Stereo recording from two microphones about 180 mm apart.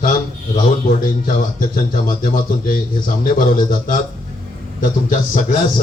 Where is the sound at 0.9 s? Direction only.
50° left (ahead or behind).